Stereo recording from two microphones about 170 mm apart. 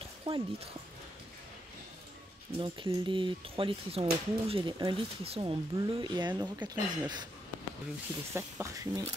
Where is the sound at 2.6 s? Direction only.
30° right (ahead or behind).